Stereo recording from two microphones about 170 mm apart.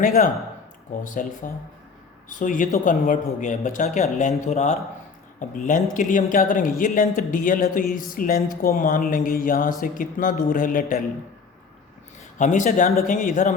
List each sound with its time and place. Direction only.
1.0 s speech: 50° left (ahead or behind)
12.4 s speech: 45° left (ahead or behind)